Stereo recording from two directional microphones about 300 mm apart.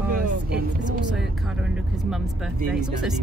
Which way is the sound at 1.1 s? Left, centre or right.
Centre.